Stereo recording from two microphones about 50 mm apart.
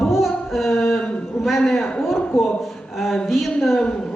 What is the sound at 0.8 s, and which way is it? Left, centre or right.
Mantra, centre.